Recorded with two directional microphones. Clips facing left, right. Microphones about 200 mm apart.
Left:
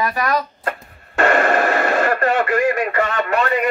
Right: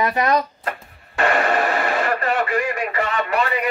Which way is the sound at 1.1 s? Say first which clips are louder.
Left 3 dB; 45° left (ahead or behind).